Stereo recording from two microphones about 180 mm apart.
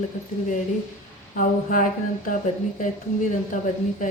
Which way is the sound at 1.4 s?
50° left (ahead or behind).